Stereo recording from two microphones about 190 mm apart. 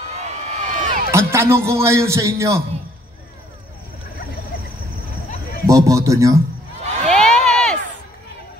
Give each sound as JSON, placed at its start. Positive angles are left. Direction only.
{"t": 0.6, "sound": "a sound", "side_deg": -40}
{"t": 1.1, "sound": "a man's voice", "side_deg": -15}
{"t": 5.7, "sound": "a man's voice", "side_deg": -15}
{"t": 7.1, "sound": "crowd", "side_deg": 5}